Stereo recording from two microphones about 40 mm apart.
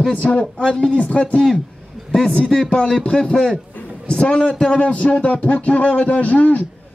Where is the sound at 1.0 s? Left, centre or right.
Left.